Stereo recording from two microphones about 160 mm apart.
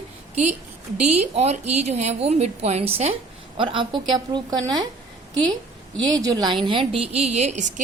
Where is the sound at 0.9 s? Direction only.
45° right (ahead or behind).